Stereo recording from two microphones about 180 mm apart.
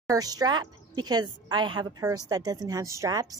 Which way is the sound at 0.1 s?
20° right (ahead or behind).